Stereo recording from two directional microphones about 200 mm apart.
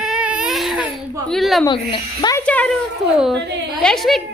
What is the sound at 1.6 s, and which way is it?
Speech, 25° left (ahead or behind).